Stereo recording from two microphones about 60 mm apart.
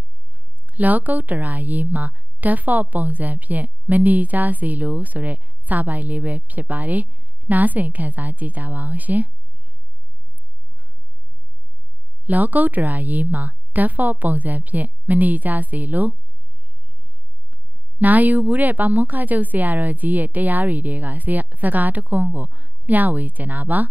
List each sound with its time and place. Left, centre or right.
0.7 s a woman's voice: right
12.3 s a woman's voice: right
17.9 s a woman's voice: right